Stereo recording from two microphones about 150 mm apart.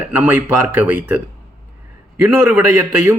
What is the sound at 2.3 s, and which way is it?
Speech, 10° right (ahead or behind).